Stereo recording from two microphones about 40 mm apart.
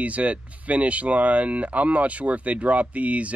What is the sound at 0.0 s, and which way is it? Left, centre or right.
Speech, right.